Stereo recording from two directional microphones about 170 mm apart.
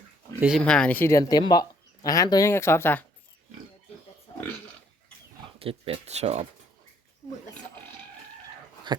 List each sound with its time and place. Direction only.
0.3 s speech: 5° right (ahead or behind)
0.6 s speech: 5° left (ahead or behind)
5.5 s speech: 35° right (ahead or behind)
8.9 s dog: 25° right (ahead or behind)